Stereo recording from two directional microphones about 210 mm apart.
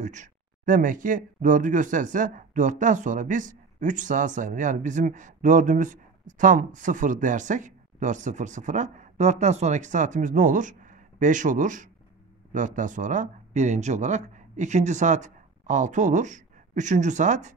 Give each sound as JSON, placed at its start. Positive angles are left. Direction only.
{"t": 0.0, "sound": "speech", "side_deg": -35}